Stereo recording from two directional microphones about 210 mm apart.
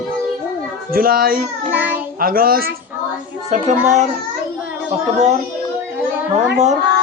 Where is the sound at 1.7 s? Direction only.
10° right (ahead or behind).